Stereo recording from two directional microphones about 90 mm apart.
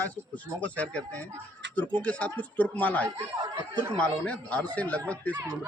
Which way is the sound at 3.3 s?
55° right (ahead or behind).